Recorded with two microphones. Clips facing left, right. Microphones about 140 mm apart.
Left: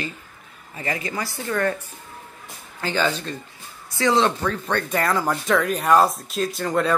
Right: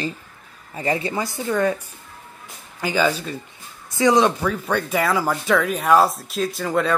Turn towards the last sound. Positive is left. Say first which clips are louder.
# even
turn(degrees=0)  # may be behind; listen again after turning